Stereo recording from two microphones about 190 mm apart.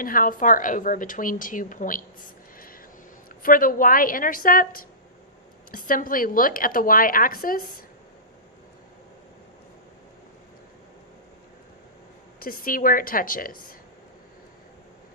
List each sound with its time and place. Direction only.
0.0 s a woman's voice: 45° left (ahead or behind)
2.6 s vehicle: 50° left (ahead or behind)
3.4 s a woman's voice: 45° left (ahead or behind)
12.4 s a woman's voice: 50° left (ahead or behind)